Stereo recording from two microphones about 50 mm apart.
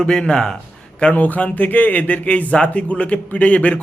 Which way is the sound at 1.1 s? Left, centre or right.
Left.